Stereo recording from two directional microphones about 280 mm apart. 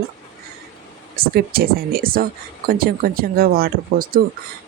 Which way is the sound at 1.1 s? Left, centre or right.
Right.